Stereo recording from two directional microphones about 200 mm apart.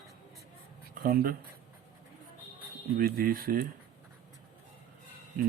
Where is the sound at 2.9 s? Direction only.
45° right (ahead or behind).